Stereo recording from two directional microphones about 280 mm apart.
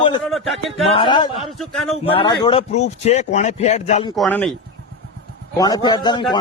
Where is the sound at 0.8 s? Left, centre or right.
Centre.